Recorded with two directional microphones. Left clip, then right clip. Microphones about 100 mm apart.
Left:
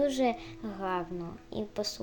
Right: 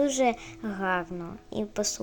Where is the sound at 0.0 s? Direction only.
20° right (ahead or behind).